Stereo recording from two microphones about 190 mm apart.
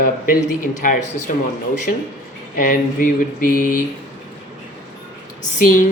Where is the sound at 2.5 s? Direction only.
45° left (ahead or behind).